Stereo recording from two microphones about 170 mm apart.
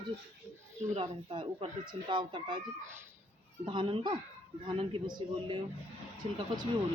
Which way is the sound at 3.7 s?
30° right (ahead or behind).